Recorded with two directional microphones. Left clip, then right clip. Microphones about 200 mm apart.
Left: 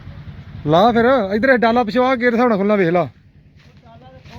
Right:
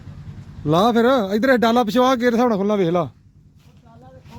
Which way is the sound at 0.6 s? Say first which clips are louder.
Left 3 dB; 10° right (ahead or behind).